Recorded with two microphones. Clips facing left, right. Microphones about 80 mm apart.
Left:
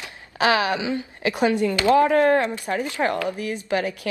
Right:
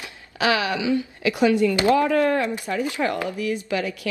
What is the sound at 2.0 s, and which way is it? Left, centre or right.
Speech, left.